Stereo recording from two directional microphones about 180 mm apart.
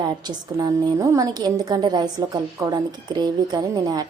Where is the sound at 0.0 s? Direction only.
20° right (ahead or behind).